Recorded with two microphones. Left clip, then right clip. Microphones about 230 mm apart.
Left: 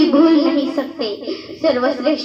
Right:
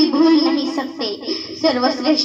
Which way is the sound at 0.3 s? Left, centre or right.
Right.